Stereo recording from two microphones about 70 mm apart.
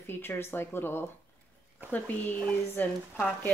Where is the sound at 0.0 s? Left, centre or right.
Left.